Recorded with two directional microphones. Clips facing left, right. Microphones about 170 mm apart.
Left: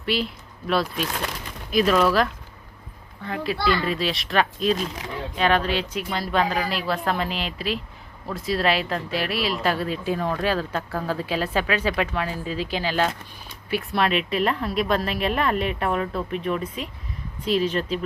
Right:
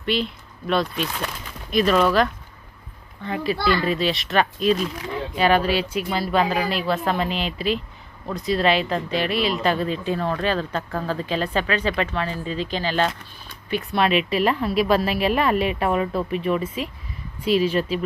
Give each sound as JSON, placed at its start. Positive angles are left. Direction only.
{"t": 0.0, "sound": "a woman's voice", "side_deg": 5}